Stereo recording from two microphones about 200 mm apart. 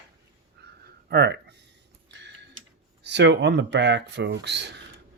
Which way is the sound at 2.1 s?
60° right (ahead or behind).